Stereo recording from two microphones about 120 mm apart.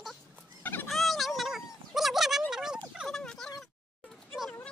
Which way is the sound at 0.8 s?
Centre (ahead or behind).